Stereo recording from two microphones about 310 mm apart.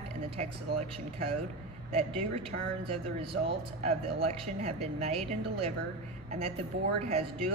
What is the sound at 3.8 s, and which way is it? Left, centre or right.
Speech, right.